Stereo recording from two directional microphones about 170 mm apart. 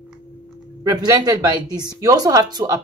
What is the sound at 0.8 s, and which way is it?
Speech, 25° right (ahead or behind).